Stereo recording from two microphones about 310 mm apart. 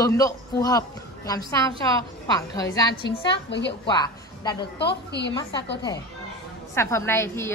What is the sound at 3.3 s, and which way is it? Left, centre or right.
Speech, left.